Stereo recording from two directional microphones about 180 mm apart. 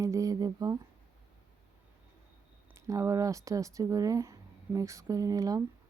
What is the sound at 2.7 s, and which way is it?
Speech, 20° right (ahead or behind).